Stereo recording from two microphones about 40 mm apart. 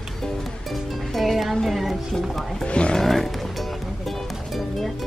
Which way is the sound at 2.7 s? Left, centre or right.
Left.